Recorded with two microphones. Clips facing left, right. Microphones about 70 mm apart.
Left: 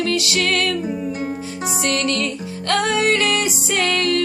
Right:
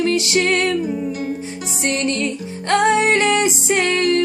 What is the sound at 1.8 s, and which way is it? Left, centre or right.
Music, right.